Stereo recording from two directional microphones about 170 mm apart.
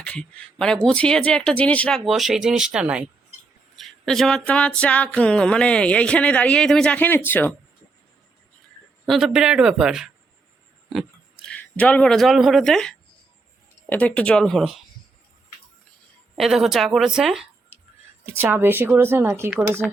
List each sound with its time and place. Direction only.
0.0 s speech: 5° left (ahead or behind)
3.8 s a sound: centre (ahead or behind)
9.0 s speech: centre (ahead or behind)
11.4 s speech: 10° left (ahead or behind)
16.4 s speech: centre (ahead or behind)